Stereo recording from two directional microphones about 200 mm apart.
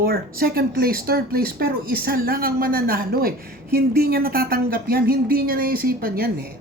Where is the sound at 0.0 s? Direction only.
50° right (ahead or behind).